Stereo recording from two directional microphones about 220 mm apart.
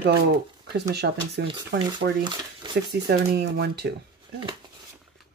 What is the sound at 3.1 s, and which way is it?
Speech, 45° right (ahead or behind).